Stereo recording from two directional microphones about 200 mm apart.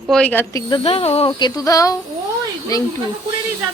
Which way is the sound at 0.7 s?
30° left (ahead or behind).